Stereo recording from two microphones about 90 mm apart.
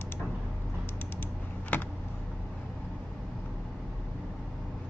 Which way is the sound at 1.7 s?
20° left (ahead or behind).